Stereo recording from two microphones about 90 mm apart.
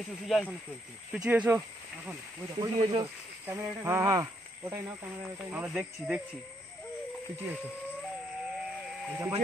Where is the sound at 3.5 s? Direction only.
30° right (ahead or behind).